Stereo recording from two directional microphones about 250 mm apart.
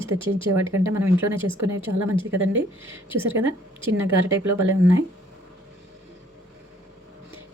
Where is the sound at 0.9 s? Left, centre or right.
Centre.